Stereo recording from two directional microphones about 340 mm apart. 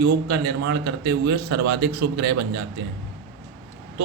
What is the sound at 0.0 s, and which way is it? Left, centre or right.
Speech, right.